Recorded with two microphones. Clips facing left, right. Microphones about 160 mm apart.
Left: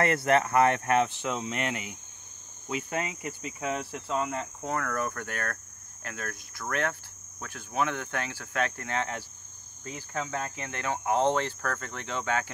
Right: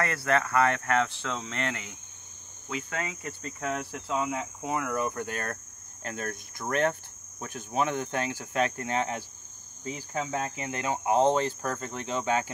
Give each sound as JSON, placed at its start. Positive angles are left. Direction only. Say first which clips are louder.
{"t": 0.0, "sound": "speech", "louder": "left 3 dB", "side_deg": 25}
{"t": 2.7, "sound": "cricket", "louder": "left 2 dB", "side_deg": 20}
{"t": 9.8, "sound": "speech", "louder": "right 2 dB", "side_deg": -15}